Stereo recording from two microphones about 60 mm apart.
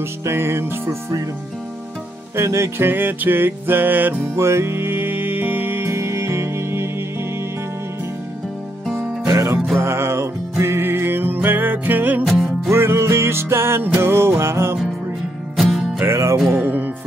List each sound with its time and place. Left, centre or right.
0.2 s music: right
2.3 s music: right
2.9 s music: right
4.4 s music: right
9.2 s music: right
9.8 s music: right
12.6 s music: right
15.5 s music: centre
16.1 s music: right
16.6 s music: right